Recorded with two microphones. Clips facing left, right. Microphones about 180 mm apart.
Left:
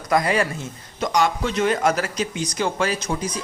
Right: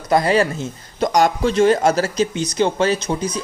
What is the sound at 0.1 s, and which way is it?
A man's voice, 30° right (ahead or behind).